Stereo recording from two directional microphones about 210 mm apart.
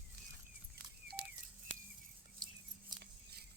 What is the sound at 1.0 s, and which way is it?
Telephone dialing, 50° right (ahead or behind).